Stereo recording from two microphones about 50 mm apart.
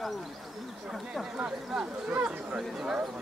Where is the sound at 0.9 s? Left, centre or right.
Centre.